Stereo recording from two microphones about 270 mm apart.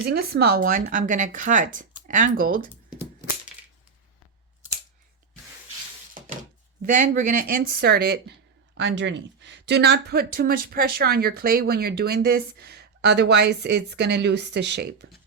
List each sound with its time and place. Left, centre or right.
0.1 s speech: right
7.1 s speech: right